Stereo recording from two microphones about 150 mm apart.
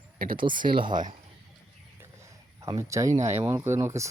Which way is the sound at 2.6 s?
20° right (ahead or behind).